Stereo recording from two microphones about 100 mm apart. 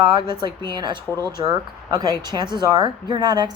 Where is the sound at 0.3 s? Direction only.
50° right (ahead or behind).